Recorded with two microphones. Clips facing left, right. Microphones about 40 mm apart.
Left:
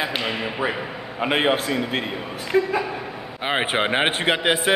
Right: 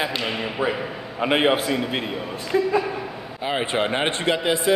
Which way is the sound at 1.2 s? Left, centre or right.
Centre.